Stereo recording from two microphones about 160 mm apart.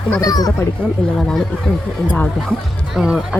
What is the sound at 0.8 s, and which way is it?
A woman's voice, 5° left (ahead or behind).